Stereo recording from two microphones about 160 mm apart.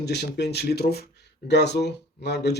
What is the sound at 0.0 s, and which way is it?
Speech, 90° left.